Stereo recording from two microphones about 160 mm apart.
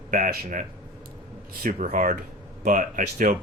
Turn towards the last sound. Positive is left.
turn(degrees=-55)  # may be behind; listen again after turning